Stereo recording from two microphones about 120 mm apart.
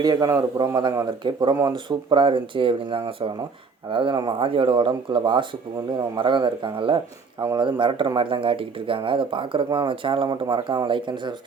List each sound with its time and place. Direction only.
0.0 s a man's voice: 35° right (ahead or behind)